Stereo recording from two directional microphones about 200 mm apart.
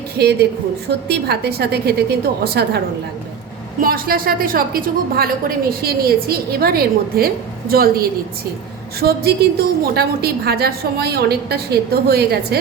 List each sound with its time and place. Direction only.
0.2 s a woman's voice: 55° right (ahead or behind)